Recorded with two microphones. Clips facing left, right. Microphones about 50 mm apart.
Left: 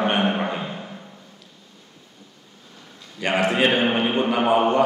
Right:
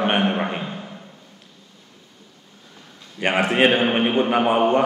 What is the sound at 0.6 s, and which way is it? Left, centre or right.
Timpani, centre.